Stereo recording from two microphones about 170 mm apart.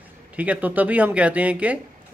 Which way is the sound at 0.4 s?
10° right (ahead or behind).